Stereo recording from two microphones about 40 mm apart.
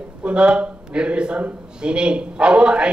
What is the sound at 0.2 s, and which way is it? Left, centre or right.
A man's voice, right.